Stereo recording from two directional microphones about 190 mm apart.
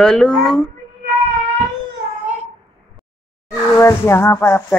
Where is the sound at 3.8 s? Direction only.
15° left (ahead or behind).